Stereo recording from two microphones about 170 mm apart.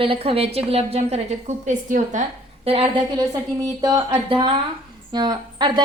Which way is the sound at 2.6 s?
30° right (ahead or behind).